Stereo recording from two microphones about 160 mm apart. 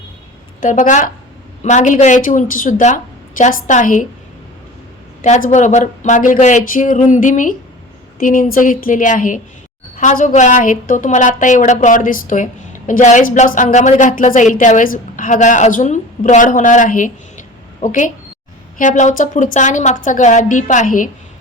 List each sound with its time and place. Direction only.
0.6 s speech: 55° left (ahead or behind)
5.2 s a woman's voice: 45° left (ahead or behind)